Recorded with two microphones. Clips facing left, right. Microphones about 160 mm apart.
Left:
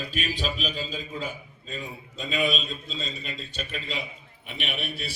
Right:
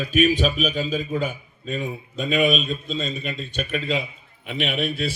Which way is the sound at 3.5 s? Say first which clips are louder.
Right 9 dB; 60° right (ahead or behind).